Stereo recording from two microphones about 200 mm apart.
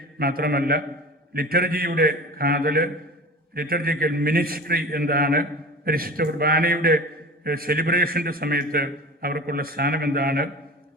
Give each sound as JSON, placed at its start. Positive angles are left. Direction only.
{"t": 0.2, "sound": "a man's voice", "side_deg": -50}